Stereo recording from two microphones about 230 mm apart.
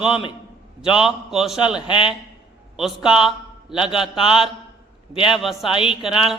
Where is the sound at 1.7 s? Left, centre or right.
Left.